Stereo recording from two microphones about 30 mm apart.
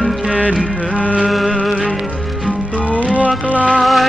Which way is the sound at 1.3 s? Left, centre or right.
Centre.